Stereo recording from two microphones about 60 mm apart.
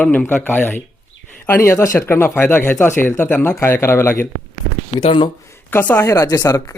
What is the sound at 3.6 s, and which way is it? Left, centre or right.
Speech, left.